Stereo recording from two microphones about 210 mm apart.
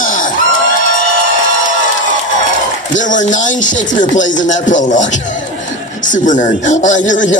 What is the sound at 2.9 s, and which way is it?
A man's voice, 35° left (ahead or behind).